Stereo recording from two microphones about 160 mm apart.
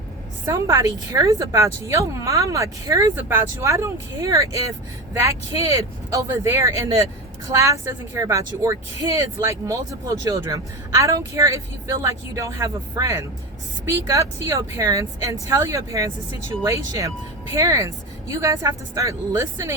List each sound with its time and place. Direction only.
0.4 s speech: 20° right (ahead or behind)